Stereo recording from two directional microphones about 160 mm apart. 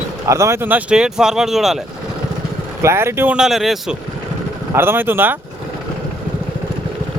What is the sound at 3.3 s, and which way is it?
Speech, centre (ahead or behind).